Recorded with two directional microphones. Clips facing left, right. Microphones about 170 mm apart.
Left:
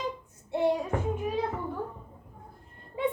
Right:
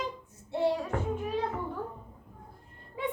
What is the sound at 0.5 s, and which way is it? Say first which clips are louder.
Music: left 2 dB; 15° left (ahead or behind).